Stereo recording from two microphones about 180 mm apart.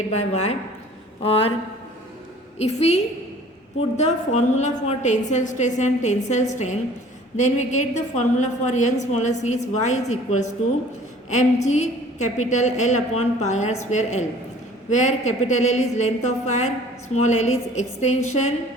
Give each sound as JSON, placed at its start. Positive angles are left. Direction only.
{"t": 1.2, "sound": "a woman's voice", "side_deg": 30}
{"t": 2.6, "sound": "a woman's voice", "side_deg": 35}